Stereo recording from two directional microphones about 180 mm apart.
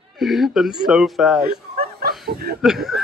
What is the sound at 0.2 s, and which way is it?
Speech, centre (ahead or behind).